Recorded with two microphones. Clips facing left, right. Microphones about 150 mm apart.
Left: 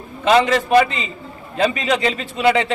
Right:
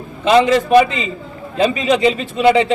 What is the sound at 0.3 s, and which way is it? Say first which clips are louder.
A man's voice: right 3 dB; 20° right (ahead or behind).